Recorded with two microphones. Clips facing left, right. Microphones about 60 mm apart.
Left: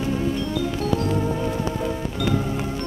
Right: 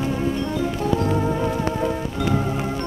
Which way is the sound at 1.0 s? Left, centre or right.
Right.